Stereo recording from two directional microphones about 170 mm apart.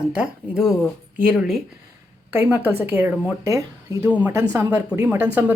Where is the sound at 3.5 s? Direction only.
20° right (ahead or behind).